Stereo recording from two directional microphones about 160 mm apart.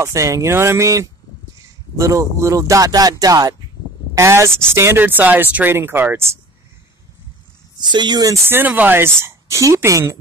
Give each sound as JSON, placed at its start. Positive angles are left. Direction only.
{"t": 0.0, "sound": "speech", "side_deg": -20}
{"t": 7.8, "sound": "speech", "side_deg": -25}